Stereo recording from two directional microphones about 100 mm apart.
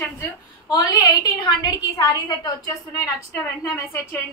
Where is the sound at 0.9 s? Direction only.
40° left (ahead or behind).